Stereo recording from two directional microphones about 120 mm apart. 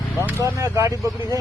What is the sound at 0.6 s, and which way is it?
Speech, 20° right (ahead or behind).